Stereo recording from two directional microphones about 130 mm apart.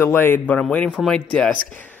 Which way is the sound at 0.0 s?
15° left (ahead or behind).